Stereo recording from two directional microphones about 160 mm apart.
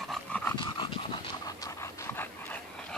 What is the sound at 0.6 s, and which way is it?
Pant, 30° left (ahead or behind).